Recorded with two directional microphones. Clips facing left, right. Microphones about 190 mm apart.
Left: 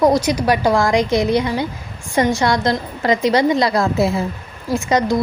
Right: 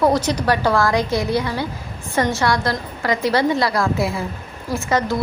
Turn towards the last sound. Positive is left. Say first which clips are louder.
# left 3 dB
turn(degrees=15)  # may be behind; listen again after turning